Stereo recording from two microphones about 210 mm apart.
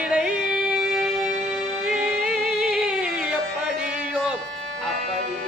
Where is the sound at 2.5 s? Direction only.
5° right (ahead or behind).